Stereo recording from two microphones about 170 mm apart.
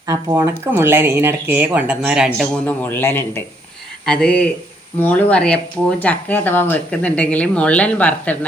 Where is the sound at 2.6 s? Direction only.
10° left (ahead or behind).